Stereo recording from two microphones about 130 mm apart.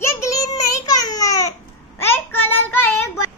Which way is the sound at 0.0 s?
20° left (ahead or behind).